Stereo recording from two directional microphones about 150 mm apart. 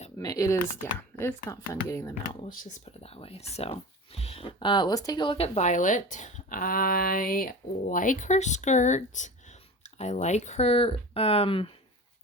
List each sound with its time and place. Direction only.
0.2 s speech: 25° left (ahead or behind)
2.5 s speech: 60° left (ahead or behind); by 5.5 s 35° left (ahead or behind)
5.5 s speech: 55° left (ahead or behind); by 11.7 s 35° left (ahead or behind)